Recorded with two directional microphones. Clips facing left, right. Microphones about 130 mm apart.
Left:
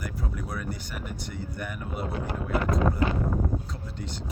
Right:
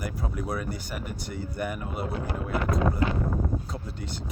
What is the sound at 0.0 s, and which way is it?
Speech, 10° right (ahead or behind).